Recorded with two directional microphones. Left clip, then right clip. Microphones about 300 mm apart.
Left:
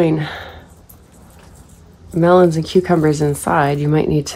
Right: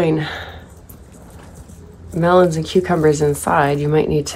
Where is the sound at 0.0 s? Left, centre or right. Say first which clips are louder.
Left 1 dB; left.